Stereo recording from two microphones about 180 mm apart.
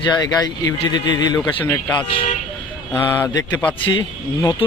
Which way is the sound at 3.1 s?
10° left (ahead or behind).